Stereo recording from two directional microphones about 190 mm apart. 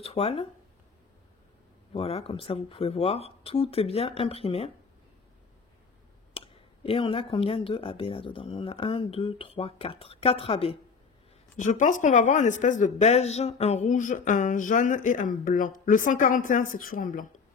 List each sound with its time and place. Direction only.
0.0 s speech: 30° left (ahead or behind)
2.0 s speech: 30° left (ahead or behind)
6.3 s speech: 30° left (ahead or behind)
11.5 s speech: 40° left (ahead or behind)